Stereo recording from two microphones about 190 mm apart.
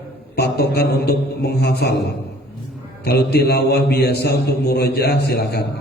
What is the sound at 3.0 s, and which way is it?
A man's voice, 60° left (ahead or behind).